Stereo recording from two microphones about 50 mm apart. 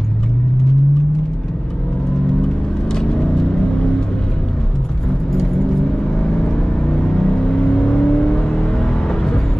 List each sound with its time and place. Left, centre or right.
2.9 s vehicle: centre
6.2 s vehicle: centre